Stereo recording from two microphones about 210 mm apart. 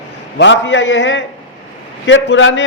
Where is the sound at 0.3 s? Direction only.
60° left (ahead or behind).